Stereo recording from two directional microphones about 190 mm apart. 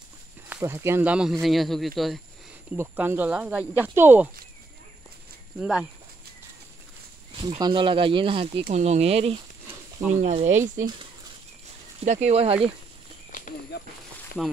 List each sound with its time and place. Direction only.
0.5 s speech: 15° right (ahead or behind)
2.7 s speech: 10° right (ahead or behind)
5.6 s speech: 5° right (ahead or behind)
7.3 s speech: 25° right (ahead or behind); by 10.6 s 40° right (ahead or behind)
12.0 s speech: 35° right (ahead or behind)
13.3 s a sound: 45° left (ahead or behind)